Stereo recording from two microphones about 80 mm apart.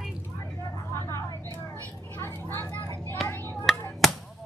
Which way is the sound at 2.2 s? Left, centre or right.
Left.